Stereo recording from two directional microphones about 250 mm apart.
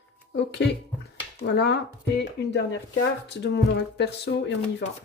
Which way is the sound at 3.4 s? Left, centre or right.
Left.